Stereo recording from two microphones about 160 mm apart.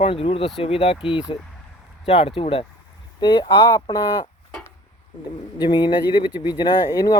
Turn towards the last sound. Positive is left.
turn(degrees=25)  # may be behind; listen again after turning